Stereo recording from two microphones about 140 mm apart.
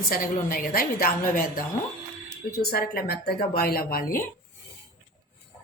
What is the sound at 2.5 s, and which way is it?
A woman's voice, 90° left.